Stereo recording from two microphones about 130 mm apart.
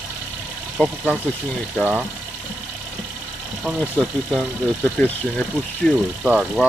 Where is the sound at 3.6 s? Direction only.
5° right (ahead or behind).